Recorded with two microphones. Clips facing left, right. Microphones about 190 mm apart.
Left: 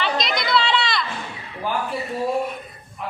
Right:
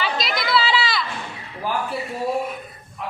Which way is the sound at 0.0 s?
5° right (ahead or behind).